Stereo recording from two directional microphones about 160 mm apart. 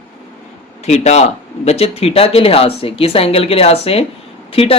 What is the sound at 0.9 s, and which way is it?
Speech, 45° left (ahead or behind).